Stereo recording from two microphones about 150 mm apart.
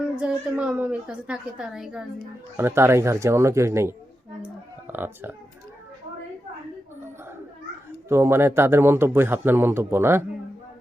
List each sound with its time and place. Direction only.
0.2 s speech: 10° right (ahead or behind)
2.6 s speech: 15° right (ahead or behind)
8.1 s speech: 15° right (ahead or behind)